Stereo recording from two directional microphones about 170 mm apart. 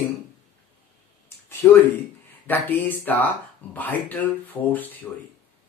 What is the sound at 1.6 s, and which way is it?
Speech, 15° left (ahead or behind).